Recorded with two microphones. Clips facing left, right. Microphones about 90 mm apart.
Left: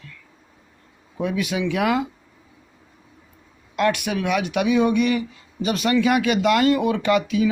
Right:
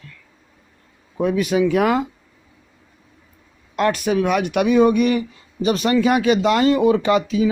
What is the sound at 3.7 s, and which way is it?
Speech, 40° right (ahead or behind).